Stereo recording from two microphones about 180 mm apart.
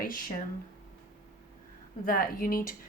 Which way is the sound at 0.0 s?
50° left (ahead or behind).